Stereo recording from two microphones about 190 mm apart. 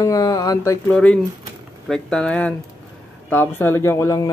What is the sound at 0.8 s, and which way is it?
Speech, 5° left (ahead or behind).